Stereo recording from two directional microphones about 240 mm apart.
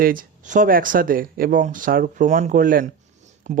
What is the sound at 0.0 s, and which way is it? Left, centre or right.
Speech, right.